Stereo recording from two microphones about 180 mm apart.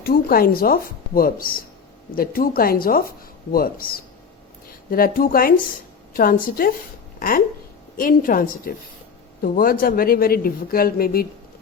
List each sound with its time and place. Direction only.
0.0 s a woman's voice: 55° left (ahead or behind)